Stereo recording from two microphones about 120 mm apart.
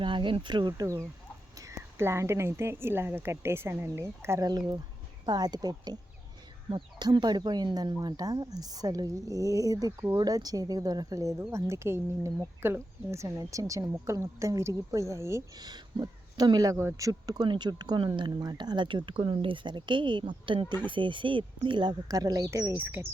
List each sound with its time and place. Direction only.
0.0 s a woman's voice: 45° right (ahead or behind); by 15.4 s 25° right (ahead or behind)
15.6 s speech: 35° right (ahead or behind); by 23.0 s 15° right (ahead or behind)